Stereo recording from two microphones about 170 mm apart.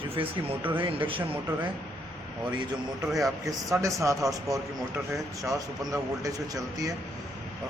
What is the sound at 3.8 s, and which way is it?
Speech, 20° right (ahead or behind).